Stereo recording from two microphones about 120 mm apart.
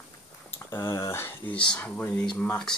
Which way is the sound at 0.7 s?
25° left (ahead or behind).